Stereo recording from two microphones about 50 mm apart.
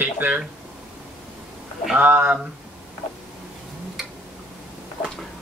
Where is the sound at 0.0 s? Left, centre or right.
Right.